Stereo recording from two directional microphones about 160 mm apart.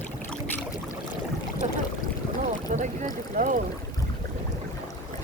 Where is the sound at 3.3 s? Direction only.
60° right (ahead or behind).